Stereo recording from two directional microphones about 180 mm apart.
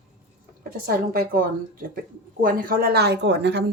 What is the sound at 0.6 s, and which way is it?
Speech, 55° right (ahead or behind).